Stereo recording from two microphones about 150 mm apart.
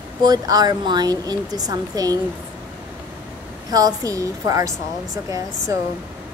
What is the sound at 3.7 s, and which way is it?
A woman's voice, 25° right (ahead or behind).